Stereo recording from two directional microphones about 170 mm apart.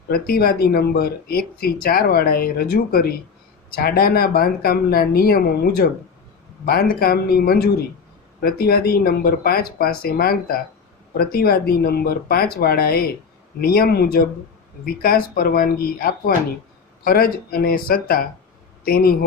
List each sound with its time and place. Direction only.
0.1 s speech: 65° left (ahead or behind)